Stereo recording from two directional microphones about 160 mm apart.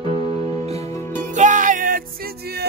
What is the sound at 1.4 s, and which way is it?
Music, 50° right (ahead or behind).